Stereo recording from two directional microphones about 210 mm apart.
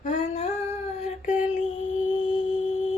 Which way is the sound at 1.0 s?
35° left (ahead or behind).